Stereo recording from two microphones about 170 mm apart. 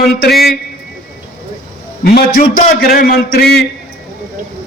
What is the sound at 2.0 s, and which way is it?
A man's voice, 60° left (ahead or behind).